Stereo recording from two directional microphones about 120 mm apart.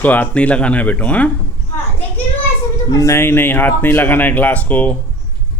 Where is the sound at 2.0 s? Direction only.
15° left (ahead or behind).